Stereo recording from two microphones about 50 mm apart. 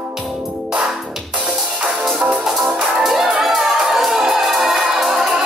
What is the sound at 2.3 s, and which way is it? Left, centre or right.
Music, centre.